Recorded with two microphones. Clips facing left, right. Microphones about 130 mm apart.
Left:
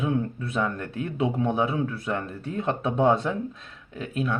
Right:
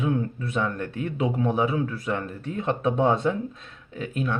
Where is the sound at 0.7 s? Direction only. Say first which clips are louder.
Right 1 dB; 30° left (ahead or behind).